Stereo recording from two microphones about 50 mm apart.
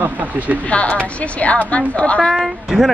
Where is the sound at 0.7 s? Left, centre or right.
Left.